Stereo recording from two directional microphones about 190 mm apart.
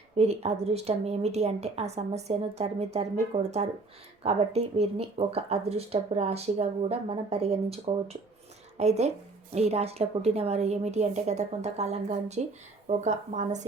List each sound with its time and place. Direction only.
0.2 s speech: 35° right (ahead or behind)